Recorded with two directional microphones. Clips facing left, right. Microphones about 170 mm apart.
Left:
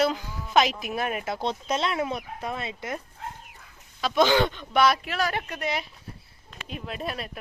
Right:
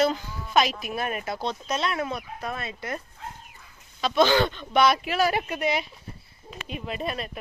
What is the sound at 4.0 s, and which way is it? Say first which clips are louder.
Speech: even; 15° left (ahead or behind).